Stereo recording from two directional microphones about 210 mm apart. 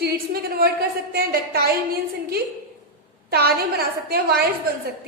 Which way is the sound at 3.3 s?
50° right (ahead or behind).